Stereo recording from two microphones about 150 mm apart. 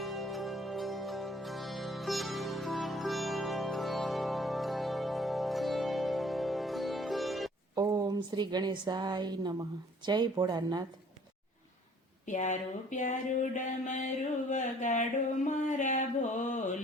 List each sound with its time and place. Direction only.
0.0 s music: centre (ahead or behind)
7.8 s a woman's voice: 25° right (ahead or behind)
12.2 s a sound: 55° left (ahead or behind)